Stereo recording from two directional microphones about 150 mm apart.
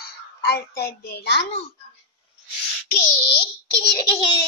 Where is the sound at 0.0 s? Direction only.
90° left.